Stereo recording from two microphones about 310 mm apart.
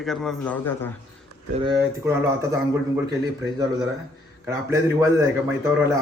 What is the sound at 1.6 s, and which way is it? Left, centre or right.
Speech, centre.